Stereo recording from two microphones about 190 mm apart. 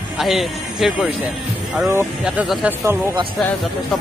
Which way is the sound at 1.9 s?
15° right (ahead or behind).